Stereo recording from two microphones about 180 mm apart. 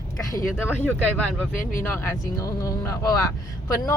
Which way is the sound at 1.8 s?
15° left (ahead or behind).